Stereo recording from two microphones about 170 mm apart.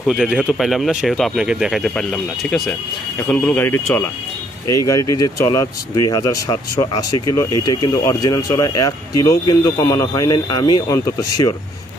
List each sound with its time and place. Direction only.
0.0 s speech: 5° right (ahead or behind); by 11.5 s 20° left (ahead or behind)